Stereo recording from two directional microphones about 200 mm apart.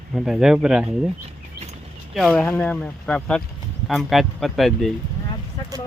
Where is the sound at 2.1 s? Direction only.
Centre (ahead or behind).